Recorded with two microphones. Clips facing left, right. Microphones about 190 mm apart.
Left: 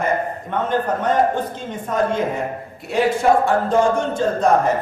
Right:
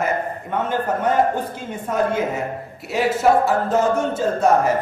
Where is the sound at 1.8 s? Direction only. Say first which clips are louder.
Left 1 dB; 10° right (ahead or behind).